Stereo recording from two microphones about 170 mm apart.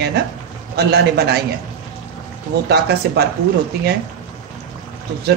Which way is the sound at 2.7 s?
75° right (ahead or behind).